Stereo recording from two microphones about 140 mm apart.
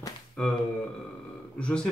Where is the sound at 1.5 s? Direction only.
5° left (ahead or behind).